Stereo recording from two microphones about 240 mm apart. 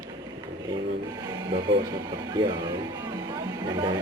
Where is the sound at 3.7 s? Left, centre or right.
Centre.